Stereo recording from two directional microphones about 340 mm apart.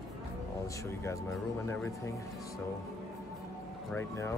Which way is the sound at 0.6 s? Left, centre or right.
Centre.